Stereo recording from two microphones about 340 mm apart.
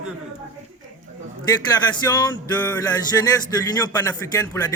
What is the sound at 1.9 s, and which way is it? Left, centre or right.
Speech, centre.